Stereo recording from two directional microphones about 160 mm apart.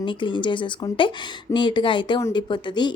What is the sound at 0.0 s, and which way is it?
A woman's voice, 30° left (ahead or behind).